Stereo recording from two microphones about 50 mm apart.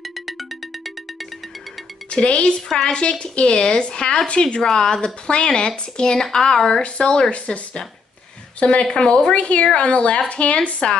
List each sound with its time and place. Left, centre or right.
2.0 s speech: left
4.6 s a woman's voice: centre